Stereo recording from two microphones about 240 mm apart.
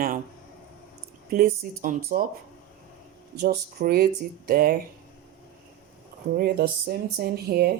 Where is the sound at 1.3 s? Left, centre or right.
Right.